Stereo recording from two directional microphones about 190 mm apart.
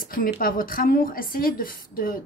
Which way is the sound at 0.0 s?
50° left (ahead or behind).